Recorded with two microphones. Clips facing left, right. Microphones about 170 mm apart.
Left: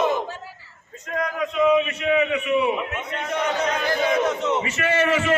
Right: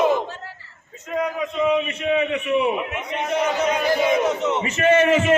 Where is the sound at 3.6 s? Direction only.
10° right (ahead or behind).